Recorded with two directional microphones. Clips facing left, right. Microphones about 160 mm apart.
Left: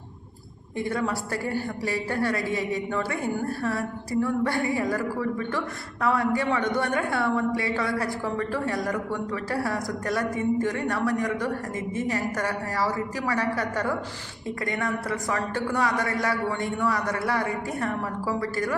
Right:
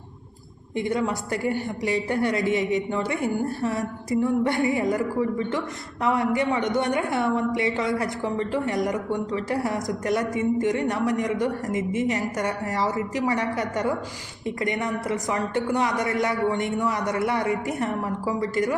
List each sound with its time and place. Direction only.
0.8 s speech: 20° right (ahead or behind)